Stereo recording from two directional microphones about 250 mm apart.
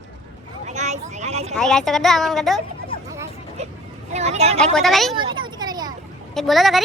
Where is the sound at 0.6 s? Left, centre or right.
Right.